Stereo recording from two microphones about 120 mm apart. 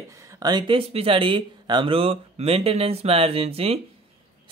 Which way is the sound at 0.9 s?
50° right (ahead or behind).